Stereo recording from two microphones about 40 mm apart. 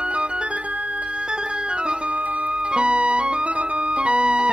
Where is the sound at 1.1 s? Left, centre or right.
Right.